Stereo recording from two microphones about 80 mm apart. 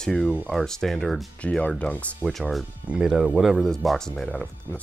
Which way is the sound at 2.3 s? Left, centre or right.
Centre.